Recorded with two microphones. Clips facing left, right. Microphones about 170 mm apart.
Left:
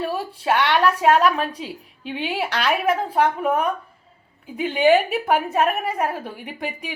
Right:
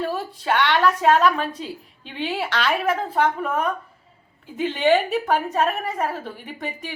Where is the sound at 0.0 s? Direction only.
10° left (ahead or behind).